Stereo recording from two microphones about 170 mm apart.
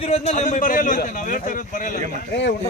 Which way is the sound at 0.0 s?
40° left (ahead or behind).